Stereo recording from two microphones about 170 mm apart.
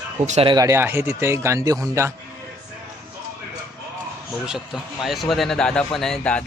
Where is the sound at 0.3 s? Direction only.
40° right (ahead or behind).